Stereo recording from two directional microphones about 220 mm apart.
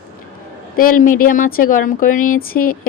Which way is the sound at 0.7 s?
40° left (ahead or behind).